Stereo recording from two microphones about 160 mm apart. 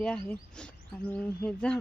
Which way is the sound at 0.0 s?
5° left (ahead or behind).